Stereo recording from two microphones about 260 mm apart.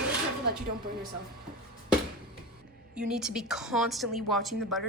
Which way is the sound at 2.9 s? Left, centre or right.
Centre.